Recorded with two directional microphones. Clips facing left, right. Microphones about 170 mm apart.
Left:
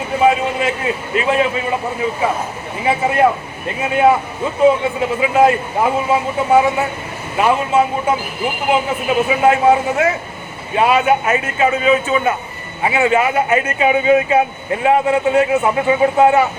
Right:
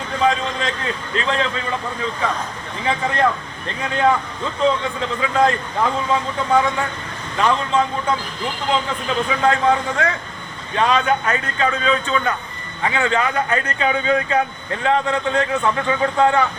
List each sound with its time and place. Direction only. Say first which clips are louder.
0.1 s a man's voice: left 5 dB; 10° left (ahead or behind)